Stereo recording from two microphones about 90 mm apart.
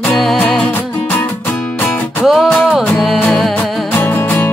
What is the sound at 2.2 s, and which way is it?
Music, 5° right (ahead or behind).